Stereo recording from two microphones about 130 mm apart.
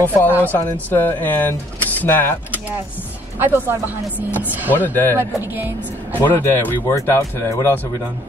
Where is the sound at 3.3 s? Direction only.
15° right (ahead or behind).